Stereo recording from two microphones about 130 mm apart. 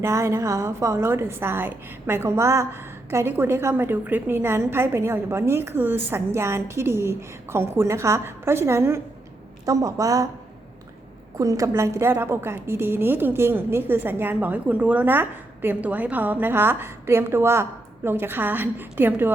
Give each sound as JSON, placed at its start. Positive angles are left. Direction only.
{"t": 0.0, "sound": "a woman's voice", "side_deg": -20}
{"t": 11.3, "sound": "a woman's voice", "side_deg": -25}